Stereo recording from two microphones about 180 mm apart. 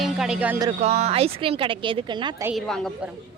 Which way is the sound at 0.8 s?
35° right (ahead or behind).